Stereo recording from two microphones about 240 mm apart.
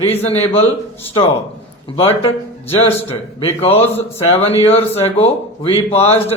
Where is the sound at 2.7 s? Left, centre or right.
Left.